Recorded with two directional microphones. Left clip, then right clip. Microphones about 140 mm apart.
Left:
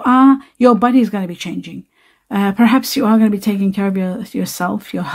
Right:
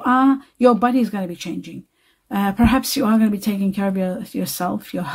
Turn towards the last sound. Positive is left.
turn(degrees=30)  # may be behind; listen again after turning